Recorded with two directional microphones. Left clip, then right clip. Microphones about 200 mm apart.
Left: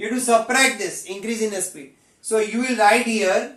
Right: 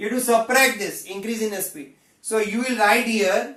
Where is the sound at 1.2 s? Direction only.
20° left (ahead or behind).